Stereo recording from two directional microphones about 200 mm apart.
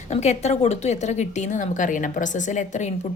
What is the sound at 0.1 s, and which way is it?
A woman's voice, 35° left (ahead or behind).